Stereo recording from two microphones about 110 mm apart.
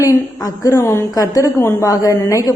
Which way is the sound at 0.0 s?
30° left (ahead or behind).